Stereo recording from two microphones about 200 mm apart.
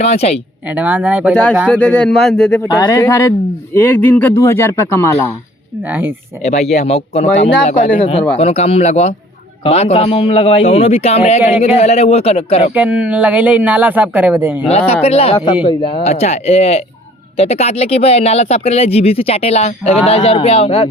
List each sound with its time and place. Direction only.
0.0 s speech: 30° left (ahead or behind)
0.8 s speech: 10° right (ahead or behind)
1.3 s speech: 5° left (ahead or behind)
2.6 s speech: 20° left (ahead or behind)
5.9 s speech: 10° right (ahead or behind)
6.4 s a man's voice: 35° left (ahead or behind)
12.7 s speech: 5° right (ahead or behind)
14.7 s speech: 30° left (ahead or behind)